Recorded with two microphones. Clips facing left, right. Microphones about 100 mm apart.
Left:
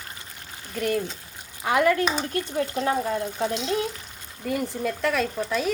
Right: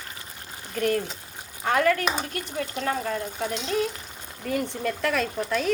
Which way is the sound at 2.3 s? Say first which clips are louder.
Left 5 dB; 30° left (ahead or behind).